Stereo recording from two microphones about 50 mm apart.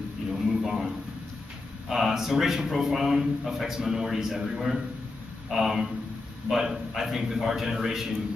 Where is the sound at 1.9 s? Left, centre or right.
Centre.